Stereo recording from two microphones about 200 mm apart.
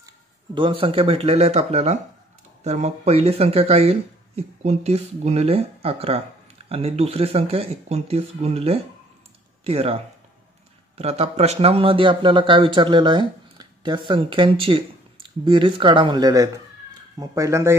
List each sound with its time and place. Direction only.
0.6 s speech: 25° right (ahead or behind)
11.0 s speech: 30° right (ahead or behind); by 17.7 s 15° right (ahead or behind)